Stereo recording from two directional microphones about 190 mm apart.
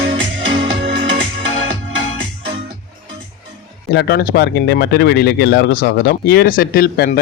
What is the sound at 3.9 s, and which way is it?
Speech, 60° left (ahead or behind).